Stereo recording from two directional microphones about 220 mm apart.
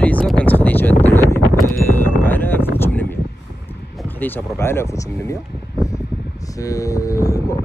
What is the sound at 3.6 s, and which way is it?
Speech, 5° left (ahead or behind).